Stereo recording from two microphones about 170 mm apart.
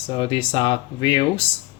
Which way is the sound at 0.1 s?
30° left (ahead or behind).